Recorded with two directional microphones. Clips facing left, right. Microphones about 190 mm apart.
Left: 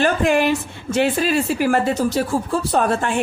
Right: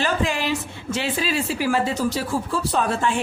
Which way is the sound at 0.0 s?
55° left (ahead or behind).